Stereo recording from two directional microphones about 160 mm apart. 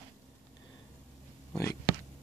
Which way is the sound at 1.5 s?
15° left (ahead or behind).